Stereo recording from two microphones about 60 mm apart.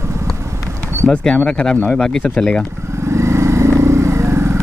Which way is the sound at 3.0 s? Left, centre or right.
Right.